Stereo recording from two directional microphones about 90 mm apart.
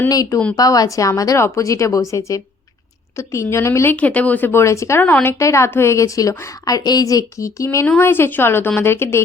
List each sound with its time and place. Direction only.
0.1 s speech: 40° left (ahead or behind)
3.9 s a woman's voice: 15° left (ahead or behind); by 7.9 s 35° left (ahead or behind)
7.9 s a woman's voice: 25° left (ahead or behind)